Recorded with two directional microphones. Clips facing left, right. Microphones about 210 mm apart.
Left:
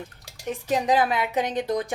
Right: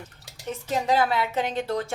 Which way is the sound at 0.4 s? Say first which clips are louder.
Left 2 dB; 15° left (ahead or behind).